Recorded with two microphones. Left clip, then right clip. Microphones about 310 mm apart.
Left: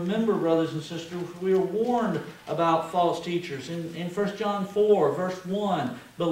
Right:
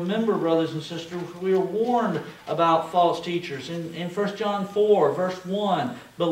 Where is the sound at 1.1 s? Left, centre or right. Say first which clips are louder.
Right 1 dB; centre.